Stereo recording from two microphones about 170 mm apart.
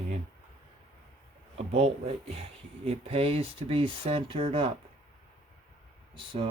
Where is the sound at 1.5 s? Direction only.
35° right (ahead or behind).